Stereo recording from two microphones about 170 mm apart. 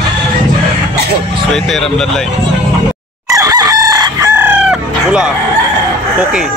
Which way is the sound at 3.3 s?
20° right (ahead or behind).